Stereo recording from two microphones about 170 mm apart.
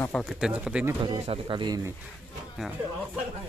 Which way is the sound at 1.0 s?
35° right (ahead or behind).